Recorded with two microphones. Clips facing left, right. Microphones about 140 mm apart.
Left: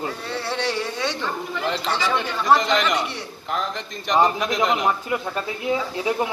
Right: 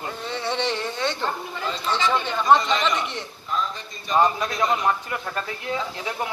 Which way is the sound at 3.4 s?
85° left.